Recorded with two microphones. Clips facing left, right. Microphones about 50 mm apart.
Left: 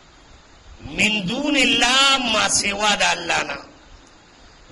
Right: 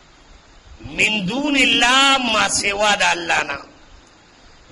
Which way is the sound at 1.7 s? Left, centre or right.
Right.